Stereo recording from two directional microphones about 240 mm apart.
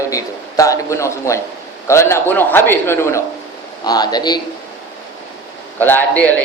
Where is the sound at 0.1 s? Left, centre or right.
Centre.